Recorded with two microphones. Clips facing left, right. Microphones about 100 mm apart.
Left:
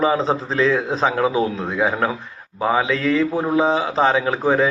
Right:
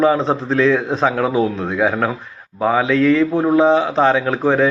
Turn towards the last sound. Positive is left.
turn(degrees=0)  # may be behind; listen again after turning